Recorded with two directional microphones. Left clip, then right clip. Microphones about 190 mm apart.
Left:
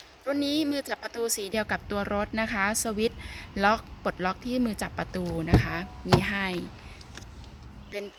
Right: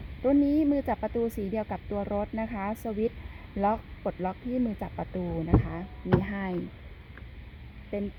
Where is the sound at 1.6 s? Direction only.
10° left (ahead or behind).